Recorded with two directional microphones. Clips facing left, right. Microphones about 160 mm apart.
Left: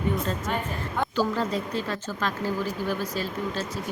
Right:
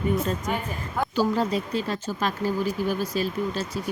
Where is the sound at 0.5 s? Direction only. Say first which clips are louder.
Even; 10° right (ahead or behind).